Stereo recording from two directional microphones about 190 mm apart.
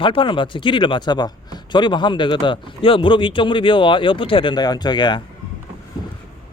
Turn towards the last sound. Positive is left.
turn(degrees=25)  # may be behind; listen again after turning